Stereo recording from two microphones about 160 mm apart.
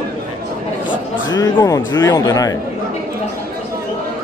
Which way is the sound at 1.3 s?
20° left (ahead or behind).